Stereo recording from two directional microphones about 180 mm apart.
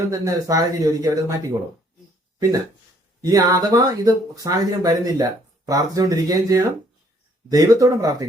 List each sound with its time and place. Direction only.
0.1 s speech: 20° right (ahead or behind)
3.2 s speech: 20° right (ahead or behind)